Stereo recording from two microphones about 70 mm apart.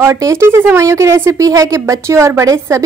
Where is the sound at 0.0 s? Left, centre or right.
Right.